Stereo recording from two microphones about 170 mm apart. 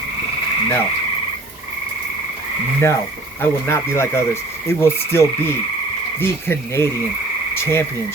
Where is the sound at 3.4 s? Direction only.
15° left (ahead or behind).